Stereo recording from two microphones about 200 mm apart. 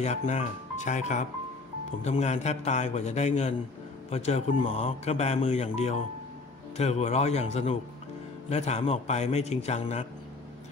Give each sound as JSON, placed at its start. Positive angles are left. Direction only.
{"t": 0.0, "sound": "speech", "side_deg": 35}